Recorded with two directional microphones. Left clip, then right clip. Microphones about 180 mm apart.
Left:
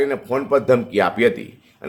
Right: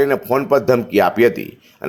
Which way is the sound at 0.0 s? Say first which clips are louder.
Right 5 dB; 30° right (ahead or behind).